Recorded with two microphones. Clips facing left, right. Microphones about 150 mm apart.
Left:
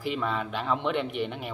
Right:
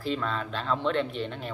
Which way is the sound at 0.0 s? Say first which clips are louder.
Left 1 dB; 15° left (ahead or behind).